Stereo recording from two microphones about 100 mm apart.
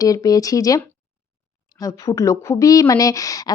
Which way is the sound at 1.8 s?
35° left (ahead or behind).